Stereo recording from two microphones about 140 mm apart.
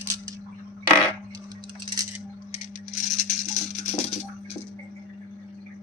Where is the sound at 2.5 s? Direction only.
55° left (ahead or behind).